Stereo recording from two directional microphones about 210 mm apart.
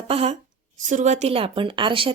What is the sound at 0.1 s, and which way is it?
A woman's voice, 30° right (ahead or behind).